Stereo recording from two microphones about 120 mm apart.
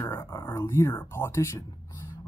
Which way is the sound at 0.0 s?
25° left (ahead or behind).